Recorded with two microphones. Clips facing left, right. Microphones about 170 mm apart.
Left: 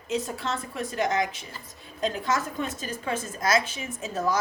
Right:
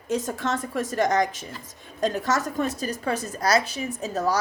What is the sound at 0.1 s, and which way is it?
A woman's voice, 45° right (ahead or behind).